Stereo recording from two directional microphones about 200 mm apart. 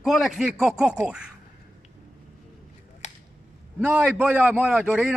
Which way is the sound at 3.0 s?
35° left (ahead or behind).